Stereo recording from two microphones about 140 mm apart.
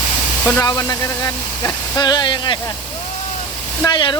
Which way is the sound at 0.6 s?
25° left (ahead or behind).